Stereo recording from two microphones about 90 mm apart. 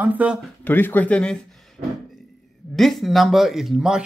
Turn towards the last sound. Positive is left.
turn(degrees=-5)  # may be behind; listen again after turning